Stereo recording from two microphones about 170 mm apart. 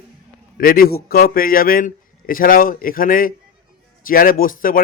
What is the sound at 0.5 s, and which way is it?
A man's voice, 60° left (ahead or behind).